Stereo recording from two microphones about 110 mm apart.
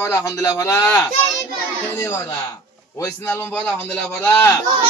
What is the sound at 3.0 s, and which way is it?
Speech, 20° left (ahead or behind).